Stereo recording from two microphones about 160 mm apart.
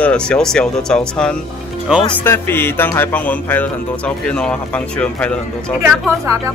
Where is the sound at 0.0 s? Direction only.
5° left (ahead or behind).